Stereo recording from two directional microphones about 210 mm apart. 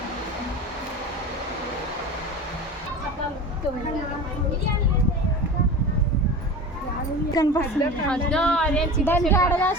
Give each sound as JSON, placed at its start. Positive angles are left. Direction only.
{"t": 7.4, "sound": "a woman's voice", "side_deg": 20}
{"t": 8.0, "sound": "a woman's voice", "side_deg": 5}